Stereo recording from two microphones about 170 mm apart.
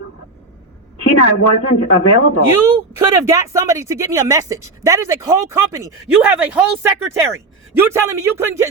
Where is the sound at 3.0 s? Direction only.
20° right (ahead or behind).